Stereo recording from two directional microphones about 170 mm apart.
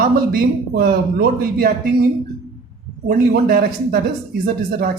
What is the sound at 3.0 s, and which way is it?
A woman's voice, 60° right (ahead or behind).